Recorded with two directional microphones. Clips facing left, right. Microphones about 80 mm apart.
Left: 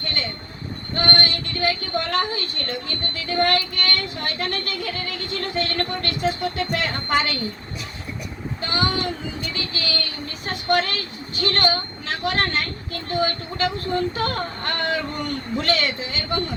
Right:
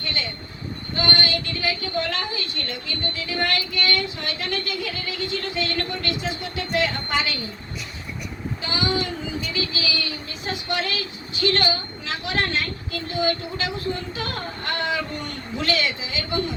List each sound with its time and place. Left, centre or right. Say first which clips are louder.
0.0 s vehicle: left 1 dB; left
0.9 s a woman's voice: left 1 dB; left
8.6 s speech: left 2 dB; left